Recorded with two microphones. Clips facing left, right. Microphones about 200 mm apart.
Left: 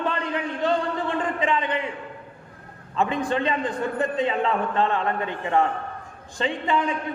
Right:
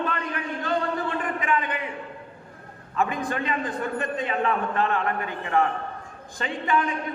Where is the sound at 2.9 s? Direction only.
30° left (ahead or behind).